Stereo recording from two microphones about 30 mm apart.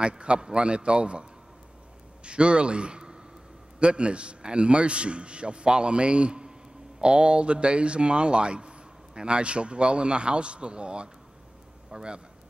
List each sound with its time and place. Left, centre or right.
0.0 s speech: right
2.2 s a man's voice: right